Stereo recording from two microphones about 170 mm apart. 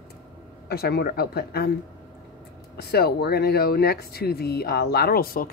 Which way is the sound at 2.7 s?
70° left (ahead or behind).